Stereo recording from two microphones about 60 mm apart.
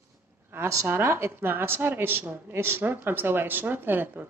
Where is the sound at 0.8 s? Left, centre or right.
Right.